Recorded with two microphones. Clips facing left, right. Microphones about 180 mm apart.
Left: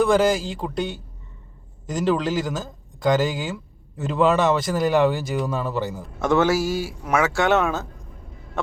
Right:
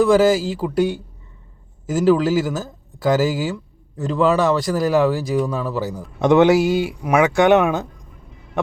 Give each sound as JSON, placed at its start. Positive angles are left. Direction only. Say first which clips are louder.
{"t": 0.0, "sound": "speech", "louder": "right 4 dB", "side_deg": 0}
{"t": 6.1, "sound": "a man's voice", "louder": "right 6 dB", "side_deg": -20}